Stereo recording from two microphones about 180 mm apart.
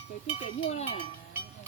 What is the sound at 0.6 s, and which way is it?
Cowbell, 35° left (ahead or behind).